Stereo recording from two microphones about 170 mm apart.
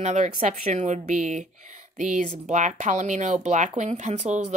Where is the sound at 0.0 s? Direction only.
45° right (ahead or behind).